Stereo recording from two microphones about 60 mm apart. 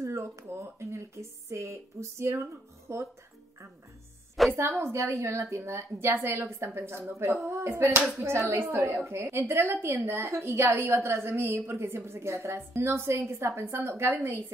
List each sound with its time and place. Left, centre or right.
0.0 s a woman's voice: right
4.6 s a woman's voice: right